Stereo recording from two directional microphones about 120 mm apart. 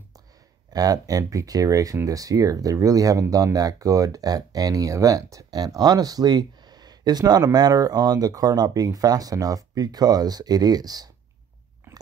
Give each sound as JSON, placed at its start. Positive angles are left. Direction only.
{"t": 0.7, "sound": "speech", "side_deg": -30}